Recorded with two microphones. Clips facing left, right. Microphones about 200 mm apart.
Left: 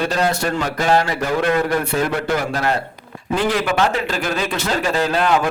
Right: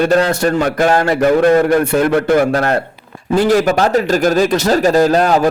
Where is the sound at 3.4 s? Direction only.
40° right (ahead or behind).